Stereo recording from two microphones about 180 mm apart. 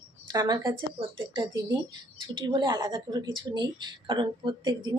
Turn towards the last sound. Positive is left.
turn(degrees=-25)  # may be behind; listen again after turning